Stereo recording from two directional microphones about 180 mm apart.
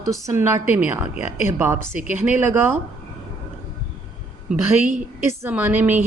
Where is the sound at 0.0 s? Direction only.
15° right (ahead or behind).